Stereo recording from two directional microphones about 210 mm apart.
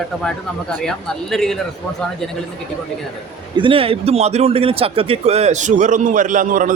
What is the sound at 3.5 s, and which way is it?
A man's voice, 25° right (ahead or behind).